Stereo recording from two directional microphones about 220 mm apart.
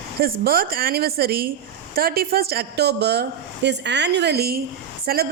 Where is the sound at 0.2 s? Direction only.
45° right (ahead or behind).